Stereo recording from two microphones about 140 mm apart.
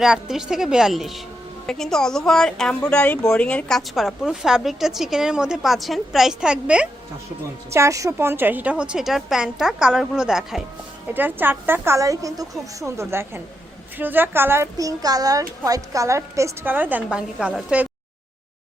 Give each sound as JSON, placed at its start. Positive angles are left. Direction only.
{"t": 0.0, "sound": "a woman's voice", "side_deg": -5}
{"t": 7.7, "sound": "a woman's voice", "side_deg": -20}
{"t": 11.1, "sound": "a woman's voice", "side_deg": -15}